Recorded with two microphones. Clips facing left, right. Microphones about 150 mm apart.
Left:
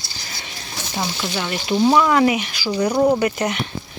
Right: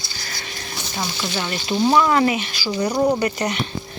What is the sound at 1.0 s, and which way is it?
Speech, 10° left (ahead or behind).